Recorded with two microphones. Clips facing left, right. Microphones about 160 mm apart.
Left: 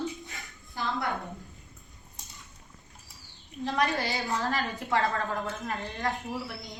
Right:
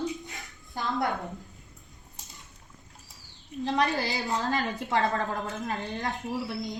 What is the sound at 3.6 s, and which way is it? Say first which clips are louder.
A woman's voice: right 1 dB; 20° right (ahead or behind).